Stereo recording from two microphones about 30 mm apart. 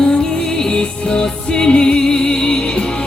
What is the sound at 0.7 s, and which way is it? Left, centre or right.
Music, left.